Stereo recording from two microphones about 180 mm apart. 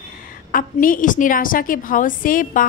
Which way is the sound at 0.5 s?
50° left (ahead or behind).